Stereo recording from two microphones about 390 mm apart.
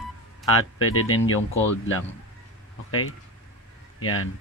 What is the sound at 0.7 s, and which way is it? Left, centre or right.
Speech, left.